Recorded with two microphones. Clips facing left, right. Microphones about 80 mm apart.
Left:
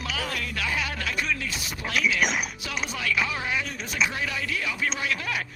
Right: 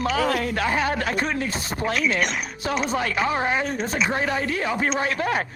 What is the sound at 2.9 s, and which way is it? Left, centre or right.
Speech, right.